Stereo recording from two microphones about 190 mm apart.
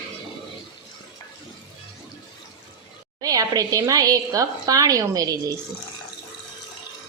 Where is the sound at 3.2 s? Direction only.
20° right (ahead or behind).